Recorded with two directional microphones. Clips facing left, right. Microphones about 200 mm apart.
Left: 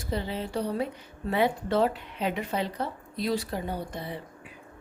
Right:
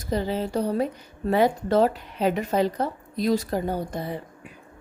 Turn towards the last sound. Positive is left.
turn(degrees=-45)  # may be behind; listen again after turning